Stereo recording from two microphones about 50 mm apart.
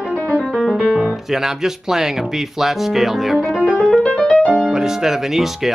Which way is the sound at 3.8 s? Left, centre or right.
Left.